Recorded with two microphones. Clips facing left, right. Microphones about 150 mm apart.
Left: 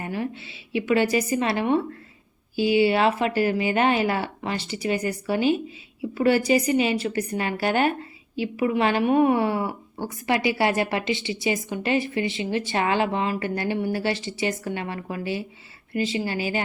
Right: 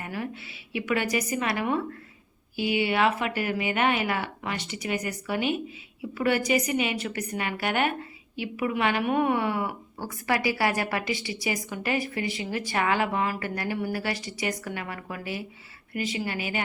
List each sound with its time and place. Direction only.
0.0 s a woman's voice: 25° left (ahead or behind)